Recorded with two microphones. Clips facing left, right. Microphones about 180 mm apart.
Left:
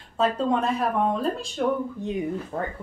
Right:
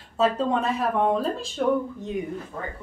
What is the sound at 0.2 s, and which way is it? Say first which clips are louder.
Speech: even; centre (ahead or behind).